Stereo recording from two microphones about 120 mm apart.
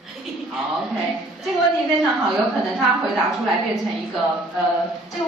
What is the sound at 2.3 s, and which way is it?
A woman's voice, centre (ahead or behind).